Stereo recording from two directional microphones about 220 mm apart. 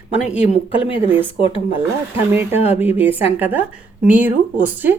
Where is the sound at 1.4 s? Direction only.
25° left (ahead or behind).